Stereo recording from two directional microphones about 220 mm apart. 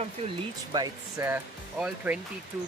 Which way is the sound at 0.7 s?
15° right (ahead or behind).